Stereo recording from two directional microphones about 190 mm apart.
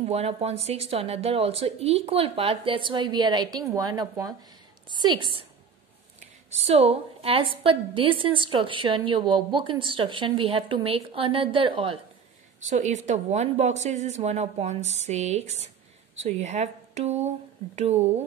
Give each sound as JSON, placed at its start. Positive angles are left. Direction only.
{"t": 0.0, "sound": "a woman's voice", "side_deg": -35}
{"t": 12.5, "sound": "speech", "side_deg": -40}